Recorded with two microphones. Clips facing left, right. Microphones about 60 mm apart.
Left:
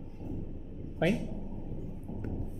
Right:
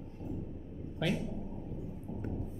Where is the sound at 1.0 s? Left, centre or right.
Left.